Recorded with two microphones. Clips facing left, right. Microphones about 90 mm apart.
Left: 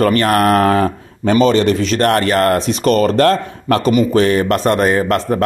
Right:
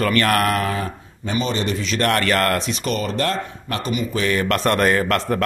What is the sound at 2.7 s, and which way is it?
Speech, 55° left (ahead or behind).